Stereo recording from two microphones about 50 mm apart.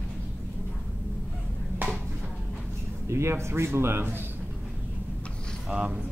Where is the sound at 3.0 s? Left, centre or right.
Right.